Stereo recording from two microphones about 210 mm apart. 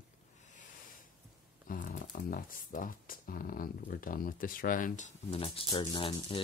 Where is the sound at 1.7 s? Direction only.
40° left (ahead or behind).